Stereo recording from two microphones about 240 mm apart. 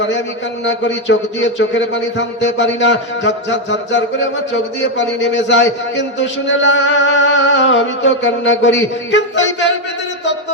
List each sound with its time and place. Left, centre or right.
0.6 s speech: left